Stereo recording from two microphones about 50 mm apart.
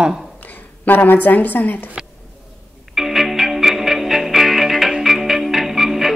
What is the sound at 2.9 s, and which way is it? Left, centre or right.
Music, centre.